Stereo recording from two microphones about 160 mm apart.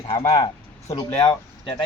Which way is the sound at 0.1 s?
25° left (ahead or behind).